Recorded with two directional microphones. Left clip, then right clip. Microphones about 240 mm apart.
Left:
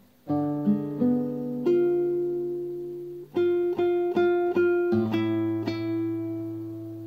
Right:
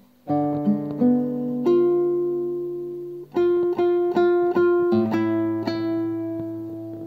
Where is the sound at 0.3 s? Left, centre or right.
Centre.